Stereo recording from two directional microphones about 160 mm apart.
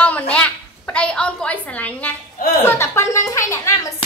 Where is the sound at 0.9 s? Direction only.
5° left (ahead or behind).